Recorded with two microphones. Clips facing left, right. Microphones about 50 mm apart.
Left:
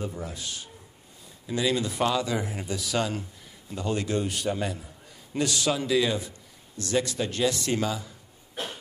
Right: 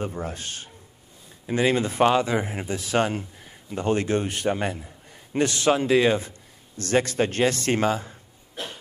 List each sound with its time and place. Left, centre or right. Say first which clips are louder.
0.0 s a man's voice: right 4 dB; right